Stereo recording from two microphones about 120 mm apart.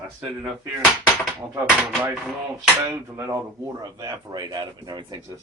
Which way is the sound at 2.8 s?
25° right (ahead or behind).